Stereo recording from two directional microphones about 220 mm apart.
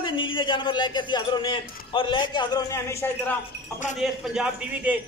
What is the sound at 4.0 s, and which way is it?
A man's voice, 5° right (ahead or behind).